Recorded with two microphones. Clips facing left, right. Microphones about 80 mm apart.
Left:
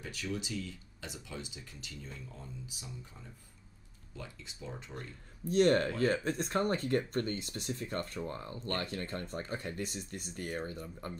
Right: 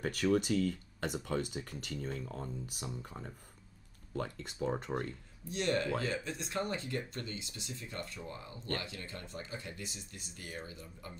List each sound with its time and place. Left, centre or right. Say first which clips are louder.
0.0 s speech: right 9 dB; right
5.5 s speech: left 6 dB; left